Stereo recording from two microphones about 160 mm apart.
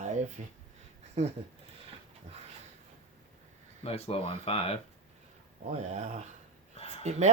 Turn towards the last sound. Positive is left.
turn(degrees=-45)  # may be behind; listen again after turning